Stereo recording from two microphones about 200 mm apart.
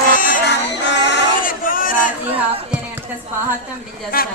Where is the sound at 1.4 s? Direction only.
45° left (ahead or behind).